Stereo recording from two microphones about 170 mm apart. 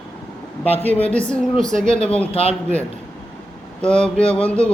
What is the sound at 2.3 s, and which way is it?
Speech, 35° left (ahead or behind).